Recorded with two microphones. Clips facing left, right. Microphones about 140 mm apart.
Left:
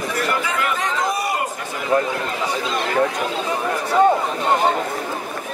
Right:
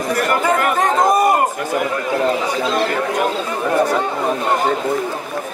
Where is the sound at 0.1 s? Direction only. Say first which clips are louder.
Right 8 dB; 50° right (ahead or behind).